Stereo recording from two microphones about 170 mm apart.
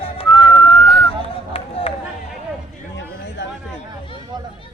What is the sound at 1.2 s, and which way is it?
Run, 35° left (ahead or behind).